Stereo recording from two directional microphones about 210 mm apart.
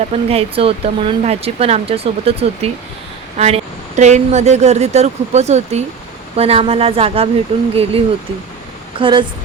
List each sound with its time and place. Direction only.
0.1 s speech: 30° right (ahead or behind)